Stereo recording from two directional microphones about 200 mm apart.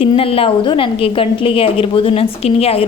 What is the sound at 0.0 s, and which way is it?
A woman's voice, 30° left (ahead or behind).